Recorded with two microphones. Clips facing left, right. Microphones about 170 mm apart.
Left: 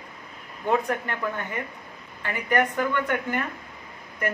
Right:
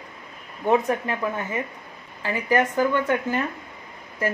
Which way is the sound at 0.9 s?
25° right (ahead or behind).